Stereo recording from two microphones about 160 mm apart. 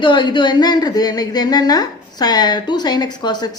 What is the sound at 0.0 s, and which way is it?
A woman's voice, 30° left (ahead or behind).